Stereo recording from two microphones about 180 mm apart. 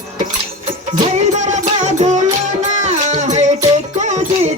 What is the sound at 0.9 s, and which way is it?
Music, 40° right (ahead or behind).